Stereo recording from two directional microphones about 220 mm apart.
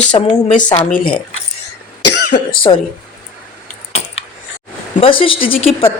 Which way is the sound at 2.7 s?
20° left (ahead or behind).